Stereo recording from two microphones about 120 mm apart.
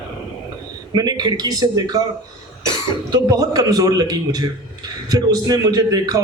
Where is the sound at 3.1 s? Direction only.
30° right (ahead or behind).